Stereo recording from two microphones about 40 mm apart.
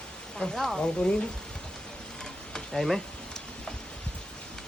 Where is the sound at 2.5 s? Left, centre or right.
Centre.